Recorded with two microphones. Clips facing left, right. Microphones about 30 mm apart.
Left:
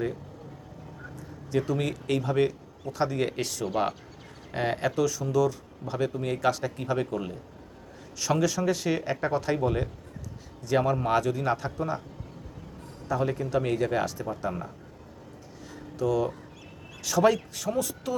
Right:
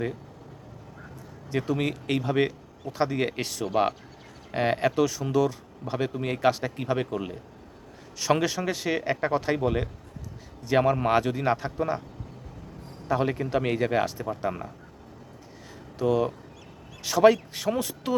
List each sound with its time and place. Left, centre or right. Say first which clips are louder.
1.5 s speech: even; right
8.7 s speech: right 1 dB; centre
13.1 s speech: right 2 dB; right
16.0 s a man's voice: right 2 dB; right
17.6 s speech: right 1 dB; right